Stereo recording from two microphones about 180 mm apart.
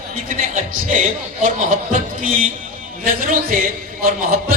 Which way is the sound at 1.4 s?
45° right (ahead or behind).